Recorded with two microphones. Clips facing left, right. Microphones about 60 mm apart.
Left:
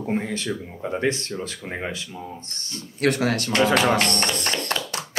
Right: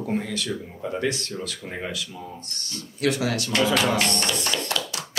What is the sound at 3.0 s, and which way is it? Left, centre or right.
Speech, left.